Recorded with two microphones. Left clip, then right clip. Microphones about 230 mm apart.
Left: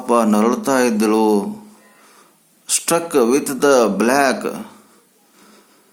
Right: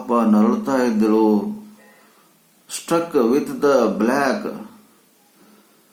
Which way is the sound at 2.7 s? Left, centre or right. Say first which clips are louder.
Left 3 dB; left.